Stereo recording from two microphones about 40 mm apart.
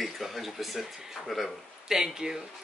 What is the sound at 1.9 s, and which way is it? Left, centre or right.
Speech, centre.